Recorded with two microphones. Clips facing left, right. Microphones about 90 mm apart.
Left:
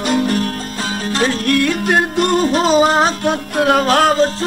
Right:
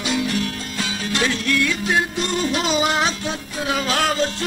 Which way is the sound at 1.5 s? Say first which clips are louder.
Left 6 dB; 50° left (ahead or behind).